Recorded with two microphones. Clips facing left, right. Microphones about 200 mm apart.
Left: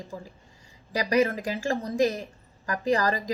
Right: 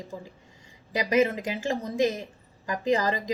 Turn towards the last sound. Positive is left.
turn(degrees=-20)  # may be behind; listen again after turning